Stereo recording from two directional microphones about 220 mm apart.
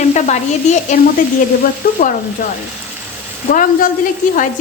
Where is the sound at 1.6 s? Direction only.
40° left (ahead or behind).